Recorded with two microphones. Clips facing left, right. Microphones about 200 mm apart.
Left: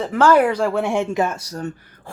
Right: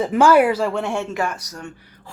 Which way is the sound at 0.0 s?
10° right (ahead or behind).